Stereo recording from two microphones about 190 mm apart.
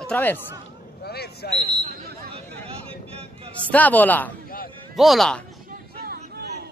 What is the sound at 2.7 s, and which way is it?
Vehicle, 30° right (ahead or behind).